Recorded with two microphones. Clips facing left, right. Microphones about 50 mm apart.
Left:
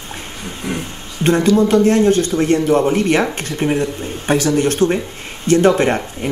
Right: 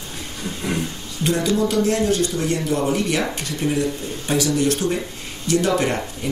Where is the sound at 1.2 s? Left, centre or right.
Left.